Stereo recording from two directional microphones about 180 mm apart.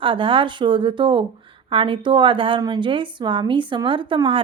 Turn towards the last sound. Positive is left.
turn(degrees=-30)  # may be behind; listen again after turning